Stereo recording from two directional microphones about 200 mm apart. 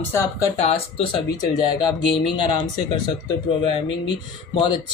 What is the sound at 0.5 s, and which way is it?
Speech, 30° left (ahead or behind).